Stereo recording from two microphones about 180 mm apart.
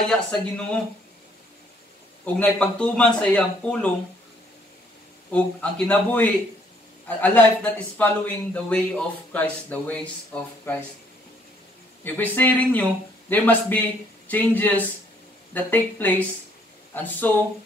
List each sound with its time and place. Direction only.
0.1 s speech: 5° left (ahead or behind)
2.2 s speech: 5° left (ahead or behind)
5.3 s speech: 5° left (ahead or behind)
12.0 s speech: 10° left (ahead or behind)